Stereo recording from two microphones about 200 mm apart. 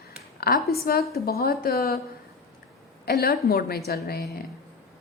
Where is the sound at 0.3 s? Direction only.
50° left (ahead or behind).